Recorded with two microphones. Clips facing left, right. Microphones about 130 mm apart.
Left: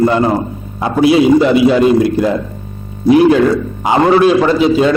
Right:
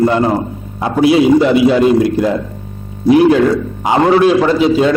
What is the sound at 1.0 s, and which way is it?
A man's voice, 10° left (ahead or behind).